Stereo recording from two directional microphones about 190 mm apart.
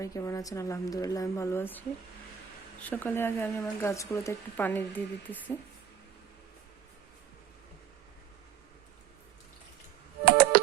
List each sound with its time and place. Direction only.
0.0 s speech: 15° left (ahead or behind)
2.8 s speech: 10° left (ahead or behind)
10.2 s music: 55° right (ahead or behind)